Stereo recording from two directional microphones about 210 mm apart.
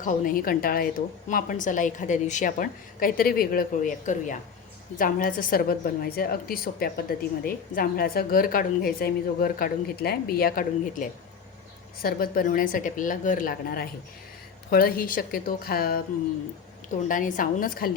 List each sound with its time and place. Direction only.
0.0 s a woman's voice: 40° left (ahead or behind)
17.1 s a woman's voice: 40° left (ahead or behind)